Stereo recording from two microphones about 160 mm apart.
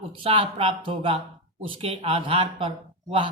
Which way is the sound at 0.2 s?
35° right (ahead or behind).